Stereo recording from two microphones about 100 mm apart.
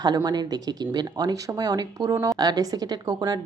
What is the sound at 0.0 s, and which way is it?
A woman's voice, 45° right (ahead or behind).